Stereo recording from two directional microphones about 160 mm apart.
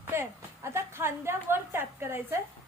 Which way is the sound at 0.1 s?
15° right (ahead or behind).